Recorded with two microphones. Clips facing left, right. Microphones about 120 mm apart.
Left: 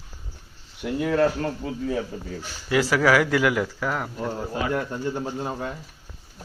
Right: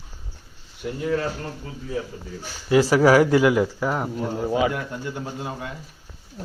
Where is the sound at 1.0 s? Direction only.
70° left (ahead or behind).